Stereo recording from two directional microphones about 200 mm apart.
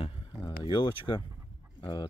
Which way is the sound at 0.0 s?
20° left (ahead or behind).